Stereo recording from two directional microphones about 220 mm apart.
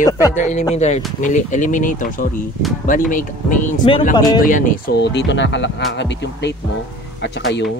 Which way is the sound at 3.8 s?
25° left (ahead or behind).